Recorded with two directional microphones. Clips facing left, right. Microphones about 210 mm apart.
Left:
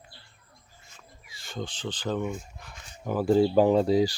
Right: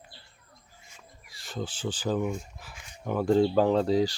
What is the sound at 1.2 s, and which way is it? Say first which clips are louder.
Speech: right 1 dB; centre (ahead or behind).